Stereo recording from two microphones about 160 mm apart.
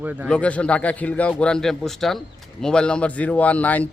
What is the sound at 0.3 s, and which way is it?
A man's voice, 10° left (ahead or behind).